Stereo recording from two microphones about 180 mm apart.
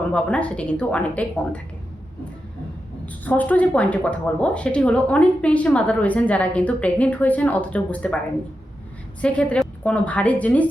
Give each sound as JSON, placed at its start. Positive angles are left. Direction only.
{"t": 0.1, "sound": "speech", "side_deg": 5}
{"t": 3.2, "sound": "speech", "side_deg": 10}
{"t": 9.2, "sound": "speech", "side_deg": 5}